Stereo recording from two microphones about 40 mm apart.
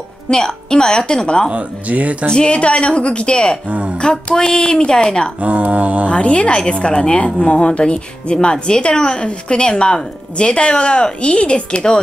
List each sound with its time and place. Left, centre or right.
0.3 s a woman's voice: centre
1.5 s speech: right
2.2 s a woman's voice: left
3.6 s speech: right
4.0 s a woman's voice: centre
5.4 s speech: right
6.0 s a woman's voice: left